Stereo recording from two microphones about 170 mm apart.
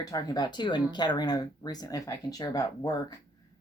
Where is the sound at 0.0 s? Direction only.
20° left (ahead or behind).